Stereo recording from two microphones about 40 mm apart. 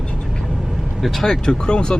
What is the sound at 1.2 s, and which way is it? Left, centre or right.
Speech, centre.